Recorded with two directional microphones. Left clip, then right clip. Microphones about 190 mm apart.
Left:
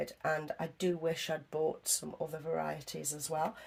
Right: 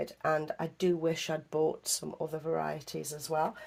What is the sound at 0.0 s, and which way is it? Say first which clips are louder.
Speech: right 4 dB; 35° right (ahead or behind).